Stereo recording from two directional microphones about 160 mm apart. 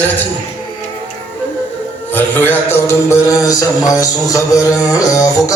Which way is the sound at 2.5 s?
15° left (ahead or behind).